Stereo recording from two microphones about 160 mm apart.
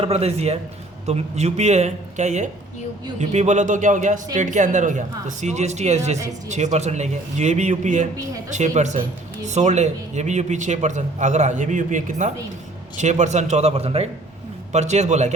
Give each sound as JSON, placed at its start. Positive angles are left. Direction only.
{"t": 0.0, "sound": "a man's voice", "side_deg": -40}